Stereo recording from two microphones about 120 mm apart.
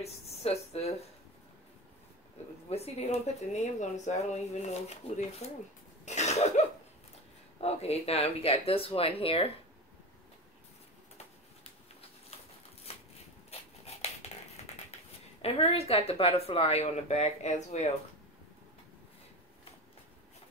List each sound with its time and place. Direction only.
0.0 s speech: 60° left (ahead or behind)
2.4 s a woman's voice: 60° left (ahead or behind)
6.0 s cough: 70° left (ahead or behind)
7.6 s speech: 60° left (ahead or behind)
13.5 s a sound: 60° left (ahead or behind)
15.4 s speech: 55° left (ahead or behind); by 17.8 s 70° left (ahead or behind)